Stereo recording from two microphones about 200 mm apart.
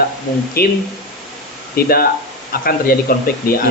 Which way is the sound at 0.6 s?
50° left (ahead or behind).